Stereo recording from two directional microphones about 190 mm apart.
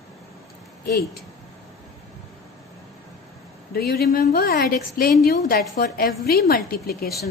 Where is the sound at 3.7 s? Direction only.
55° left (ahead or behind).